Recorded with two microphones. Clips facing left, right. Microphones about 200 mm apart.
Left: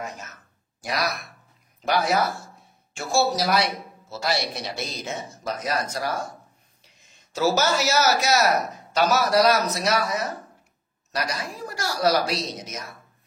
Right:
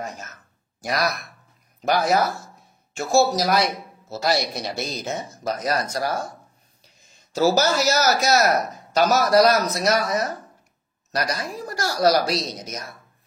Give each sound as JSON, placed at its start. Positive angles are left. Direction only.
{"t": 2.0, "sound": "speech", "side_deg": -45}